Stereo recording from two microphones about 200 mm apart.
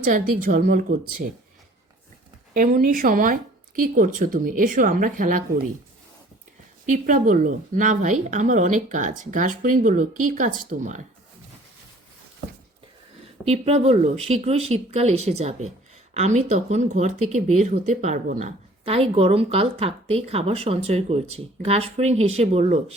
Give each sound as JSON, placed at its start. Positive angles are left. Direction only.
{"t": 0.0, "sound": "a woman's voice", "side_deg": -45}
{"t": 2.5, "sound": "a woman's voice", "side_deg": -45}
{"t": 6.8, "sound": "speech", "side_deg": -40}
{"t": 13.4, "sound": "speech", "side_deg": -30}